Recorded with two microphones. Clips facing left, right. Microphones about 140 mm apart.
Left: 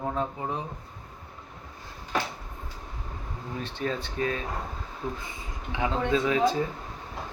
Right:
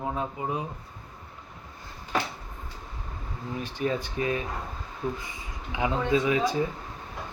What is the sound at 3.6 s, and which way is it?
Speech, 15° right (ahead or behind).